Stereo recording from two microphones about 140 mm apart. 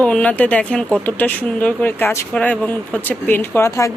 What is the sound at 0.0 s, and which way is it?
Speech, 10° left (ahead or behind).